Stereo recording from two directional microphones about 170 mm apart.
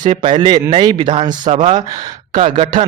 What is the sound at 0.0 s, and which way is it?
Speech, 30° right (ahead or behind).